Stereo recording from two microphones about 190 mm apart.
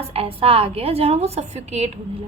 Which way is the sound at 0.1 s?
30° right (ahead or behind).